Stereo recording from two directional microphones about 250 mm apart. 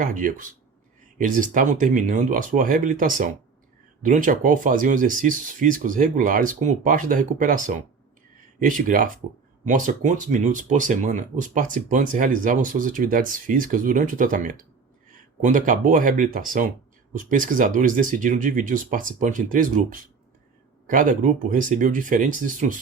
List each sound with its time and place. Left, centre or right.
0.0 s speech: right